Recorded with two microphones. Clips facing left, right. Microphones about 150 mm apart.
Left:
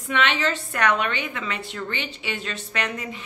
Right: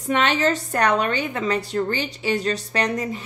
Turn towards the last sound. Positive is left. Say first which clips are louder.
# right 6 dB
turn(degrees=-40)  # may be behind; listen again after turning